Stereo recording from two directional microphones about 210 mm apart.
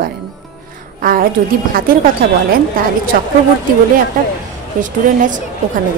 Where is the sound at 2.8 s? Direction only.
40° right (ahead or behind).